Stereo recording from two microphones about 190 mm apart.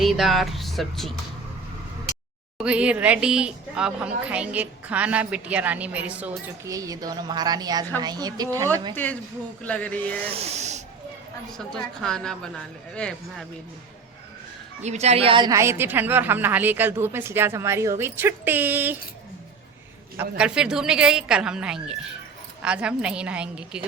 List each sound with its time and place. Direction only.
0.0 s speech: centre (ahead or behind)
2.6 s a woman's voice: 5° right (ahead or behind)
6.7 s a woman's voice: 20° right (ahead or behind)
9.6 s a sound: 5° left (ahead or behind)
10.2 s speech: 35° right (ahead or behind)
11.5 s a woman's voice: 5° left (ahead or behind)
14.8 s a woman's voice: 35° right (ahead or behind); by 18.9 s 10° right (ahead or behind)
20.4 s a woman's voice: 5° right (ahead or behind)